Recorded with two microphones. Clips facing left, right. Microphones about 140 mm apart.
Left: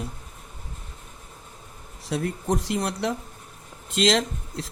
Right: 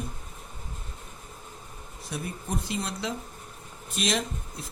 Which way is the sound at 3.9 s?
90° left.